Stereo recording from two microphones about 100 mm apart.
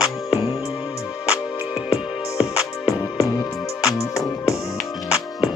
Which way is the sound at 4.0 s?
30° left (ahead or behind).